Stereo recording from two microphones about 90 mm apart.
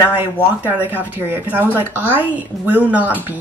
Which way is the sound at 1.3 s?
20° right (ahead or behind).